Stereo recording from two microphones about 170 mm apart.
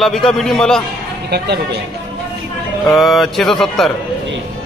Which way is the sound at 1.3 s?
75° right (ahead or behind).